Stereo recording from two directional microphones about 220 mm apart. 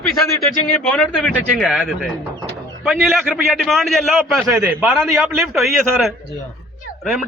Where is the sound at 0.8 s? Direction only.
Centre (ahead or behind).